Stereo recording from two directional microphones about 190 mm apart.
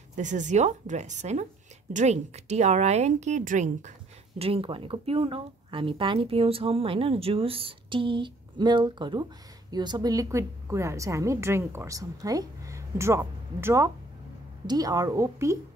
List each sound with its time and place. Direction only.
0.1 s a woman's voice: 40° right (ahead or behind); by 15.5 s 15° right (ahead or behind)